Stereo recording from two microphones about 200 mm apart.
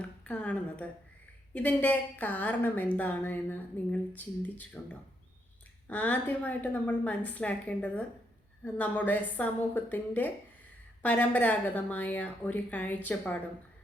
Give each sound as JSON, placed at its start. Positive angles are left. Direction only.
{"t": 0.0, "sound": "a woman's voice", "side_deg": 5}
{"t": 5.9, "sound": "speech", "side_deg": 5}